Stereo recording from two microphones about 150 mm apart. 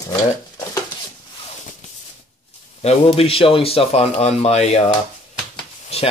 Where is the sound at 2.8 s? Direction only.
45° left (ahead or behind).